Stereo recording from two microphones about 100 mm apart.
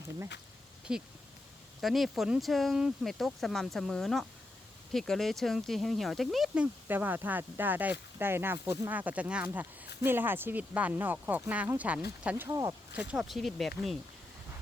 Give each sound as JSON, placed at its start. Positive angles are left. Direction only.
{"t": 0.9, "sound": "speech", "side_deg": -10}
{"t": 6.5, "sound": "speech", "side_deg": -15}
{"t": 8.9, "sound": "speech", "side_deg": -15}
{"t": 12.5, "sound": "speech", "side_deg": -30}
{"t": 13.0, "sound": "speech", "side_deg": -5}